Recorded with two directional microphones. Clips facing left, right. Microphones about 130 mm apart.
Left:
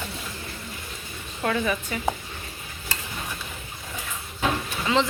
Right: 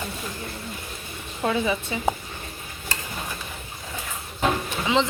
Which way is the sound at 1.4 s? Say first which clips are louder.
Right 1 dB; 20° right (ahead or behind).